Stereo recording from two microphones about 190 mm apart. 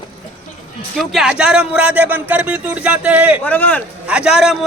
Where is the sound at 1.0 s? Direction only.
5° right (ahead or behind).